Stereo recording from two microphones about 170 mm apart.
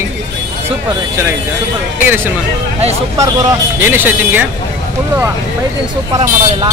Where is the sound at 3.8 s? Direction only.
10° right (ahead or behind).